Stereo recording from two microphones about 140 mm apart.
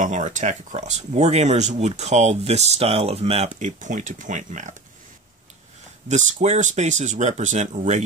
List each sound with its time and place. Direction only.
0.0 s speech: 60° right (ahead or behind)
6.0 s speech: 60° right (ahead or behind)